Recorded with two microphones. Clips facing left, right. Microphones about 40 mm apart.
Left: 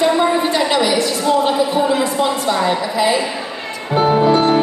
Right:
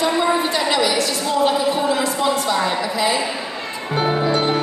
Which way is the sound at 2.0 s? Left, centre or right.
Centre.